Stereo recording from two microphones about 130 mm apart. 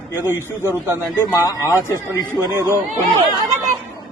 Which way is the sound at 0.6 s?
20° right (ahead or behind).